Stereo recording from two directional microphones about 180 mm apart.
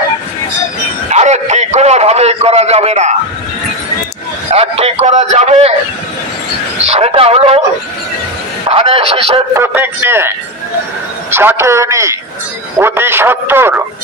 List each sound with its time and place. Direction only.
1.1 s a man's voice: 40° right (ahead or behind)
4.5 s a man's voice: 35° right (ahead or behind)
6.8 s a man's voice: 35° right (ahead or behind)
8.6 s a man's voice: 30° right (ahead or behind)
9.5 s a man's voice: 10° right (ahead or behind)